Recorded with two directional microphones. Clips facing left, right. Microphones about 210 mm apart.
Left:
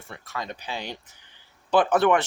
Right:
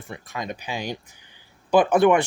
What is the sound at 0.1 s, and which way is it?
Speech, 15° right (ahead or behind).